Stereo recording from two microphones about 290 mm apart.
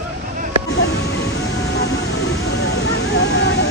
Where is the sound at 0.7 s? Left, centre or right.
Left.